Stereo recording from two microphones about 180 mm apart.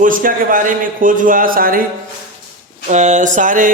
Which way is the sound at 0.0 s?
50° right (ahead or behind).